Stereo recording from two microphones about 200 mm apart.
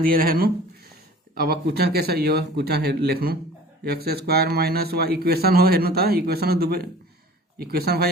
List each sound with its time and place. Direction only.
0.0 s a man's voice: 45° right (ahead or behind)